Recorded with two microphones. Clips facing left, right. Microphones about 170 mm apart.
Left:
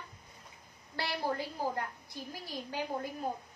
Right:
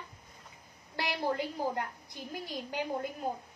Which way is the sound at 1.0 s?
15° right (ahead or behind).